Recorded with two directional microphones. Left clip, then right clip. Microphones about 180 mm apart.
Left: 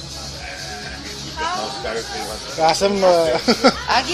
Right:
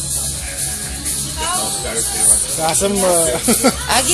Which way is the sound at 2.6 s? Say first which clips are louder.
Left 3 dB; 20° left (ahead or behind).